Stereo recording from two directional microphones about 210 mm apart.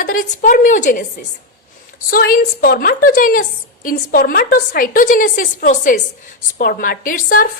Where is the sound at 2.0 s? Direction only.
45° left (ahead or behind).